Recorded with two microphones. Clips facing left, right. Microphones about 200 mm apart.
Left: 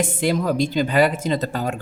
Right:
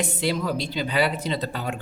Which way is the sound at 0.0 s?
50° left (ahead or behind).